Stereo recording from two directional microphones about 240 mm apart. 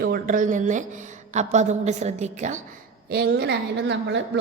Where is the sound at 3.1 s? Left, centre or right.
Right.